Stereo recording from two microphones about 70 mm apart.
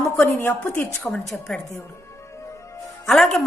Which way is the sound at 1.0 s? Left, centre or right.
Centre.